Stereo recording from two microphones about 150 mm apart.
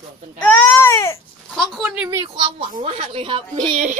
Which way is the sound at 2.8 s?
40° right (ahead or behind).